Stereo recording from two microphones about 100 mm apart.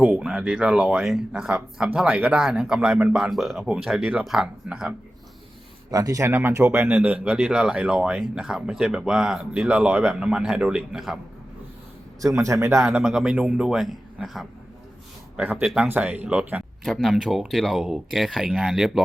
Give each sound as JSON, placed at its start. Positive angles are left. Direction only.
{"t": 0.0, "sound": "speech", "side_deg": -10}
{"t": 5.9, "sound": "speech", "side_deg": -35}
{"t": 12.2, "sound": "speech", "side_deg": -35}
{"t": 13.0, "sound": "speech", "side_deg": -5}
{"t": 15.6, "sound": "speech", "side_deg": -5}
{"t": 15.9, "sound": "speech", "side_deg": -15}
{"t": 16.8, "sound": "speech", "side_deg": 0}